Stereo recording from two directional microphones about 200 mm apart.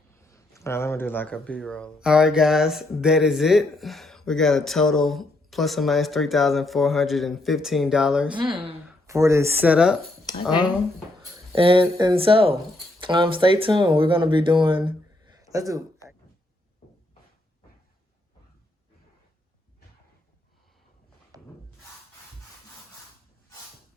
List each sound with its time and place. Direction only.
0.2 s speech: 15° left (ahead or behind); by 8.4 s 5° right (ahead or behind)
9.0 s speech: 15° right (ahead or behind)
11.5 s speech: 25° right (ahead or behind)
15.4 s a sound: 15° right (ahead or behind)
16.0 s a sound: 15° left (ahead or behind)
21.3 s rub: 20° right (ahead or behind)